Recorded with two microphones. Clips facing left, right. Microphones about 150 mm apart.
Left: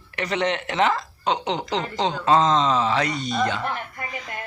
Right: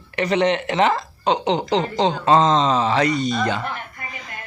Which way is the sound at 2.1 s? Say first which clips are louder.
Right 2 dB; 5° left (ahead or behind).